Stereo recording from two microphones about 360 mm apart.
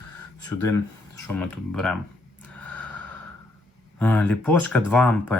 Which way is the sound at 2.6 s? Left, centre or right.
Centre.